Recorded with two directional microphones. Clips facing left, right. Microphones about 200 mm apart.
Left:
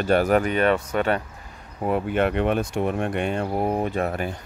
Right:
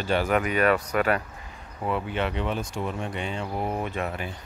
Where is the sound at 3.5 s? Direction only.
35° left (ahead or behind).